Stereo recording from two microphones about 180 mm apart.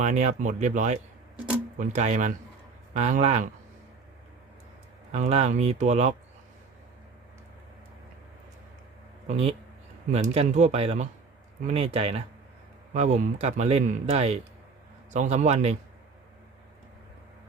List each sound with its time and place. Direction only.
0.0 s speech: 40° right (ahead or behind)
5.1 s speech: 35° right (ahead or behind)
9.2 s speech: 35° right (ahead or behind)